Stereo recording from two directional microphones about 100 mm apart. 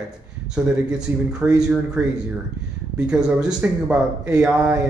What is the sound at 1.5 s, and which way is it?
Speech, 5° right (ahead or behind).